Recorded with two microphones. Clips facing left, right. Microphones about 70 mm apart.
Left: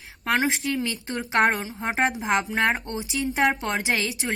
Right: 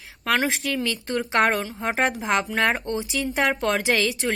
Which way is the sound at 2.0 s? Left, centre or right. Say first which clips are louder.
Even; centre.